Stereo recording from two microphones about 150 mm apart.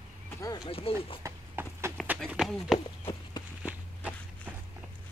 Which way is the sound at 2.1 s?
Centre (ahead or behind).